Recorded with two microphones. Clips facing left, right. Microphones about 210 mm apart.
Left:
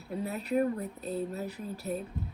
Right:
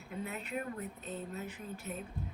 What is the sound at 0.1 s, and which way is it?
A woman's voice, 35° left (ahead or behind).